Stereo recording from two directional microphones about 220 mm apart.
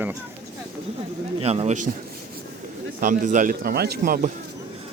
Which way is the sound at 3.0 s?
35° right (ahead or behind).